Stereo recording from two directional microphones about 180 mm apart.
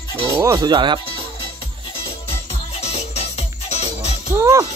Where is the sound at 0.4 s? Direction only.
20° right (ahead or behind).